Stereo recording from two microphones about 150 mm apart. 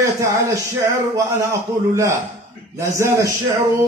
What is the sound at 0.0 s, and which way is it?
Speech, 20° right (ahead or behind).